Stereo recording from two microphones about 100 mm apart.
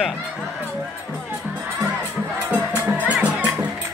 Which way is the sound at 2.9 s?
15° right (ahead or behind).